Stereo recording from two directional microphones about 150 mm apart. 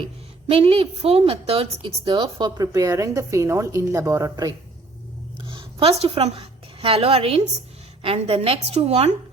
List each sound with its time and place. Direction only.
0.4 s a woman's voice: 40° right (ahead or behind)